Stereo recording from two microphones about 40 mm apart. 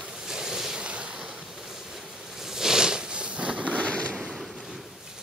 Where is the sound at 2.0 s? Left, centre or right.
Centre; by 3.7 s right.